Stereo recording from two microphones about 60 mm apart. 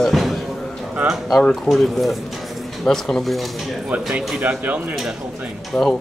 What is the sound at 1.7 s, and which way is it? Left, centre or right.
Speech, centre.